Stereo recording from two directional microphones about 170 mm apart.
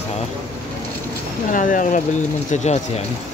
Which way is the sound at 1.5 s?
50° left (ahead or behind).